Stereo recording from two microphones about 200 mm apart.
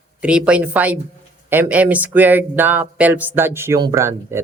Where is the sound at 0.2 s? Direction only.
5° right (ahead or behind).